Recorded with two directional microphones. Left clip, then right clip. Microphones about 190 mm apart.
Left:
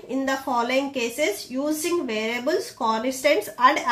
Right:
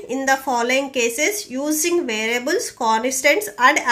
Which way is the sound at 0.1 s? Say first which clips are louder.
Right 5 dB; 35° right (ahead or behind).